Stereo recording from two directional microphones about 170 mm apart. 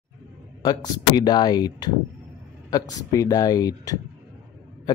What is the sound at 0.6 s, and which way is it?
Speech, 25° left (ahead or behind).